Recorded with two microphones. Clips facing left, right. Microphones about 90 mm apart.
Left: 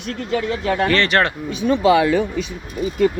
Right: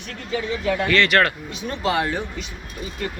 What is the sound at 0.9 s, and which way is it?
Speech, 35° left (ahead or behind).